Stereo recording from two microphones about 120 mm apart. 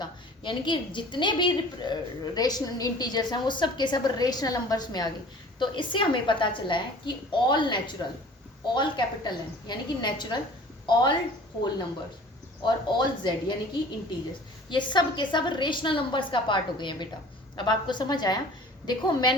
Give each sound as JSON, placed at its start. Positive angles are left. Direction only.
{"t": 0.0, "sound": "a woman's voice", "side_deg": 40}
{"t": 12.6, "sound": "a woman's voice", "side_deg": 40}
{"t": 14.7, "sound": "a woman's voice", "side_deg": 40}